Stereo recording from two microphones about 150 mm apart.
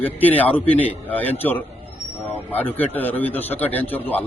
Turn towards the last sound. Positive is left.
turn(degrees=10)  # may be behind; listen again after turning